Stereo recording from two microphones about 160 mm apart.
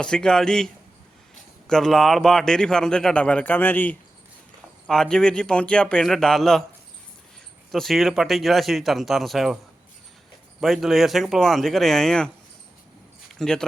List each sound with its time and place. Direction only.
0.0 s a man's voice: 5° left (ahead or behind)
7.7 s a man's voice: centre (ahead or behind)
10.6 s a man's voice: centre (ahead or behind)
13.4 s a man's voice: 5° left (ahead or behind)